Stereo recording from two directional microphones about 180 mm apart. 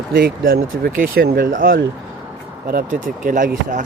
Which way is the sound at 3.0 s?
50° right (ahead or behind).